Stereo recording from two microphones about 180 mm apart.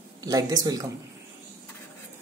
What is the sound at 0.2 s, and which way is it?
Speech, 20° right (ahead or behind).